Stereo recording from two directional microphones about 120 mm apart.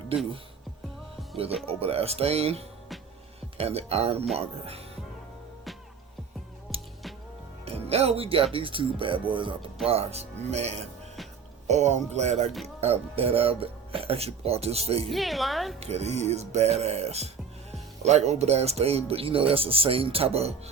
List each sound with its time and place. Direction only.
1.6 s speech: 55° right (ahead or behind)
6.7 s music: centre (ahead or behind)
7.6 s speech: 60° right (ahead or behind)
9.8 s speech: 60° right (ahead or behind)
12.6 s speech: 55° right (ahead or behind)
15.1 s a woman's voice: centre (ahead or behind)
15.8 s speech: 65° right (ahead or behind)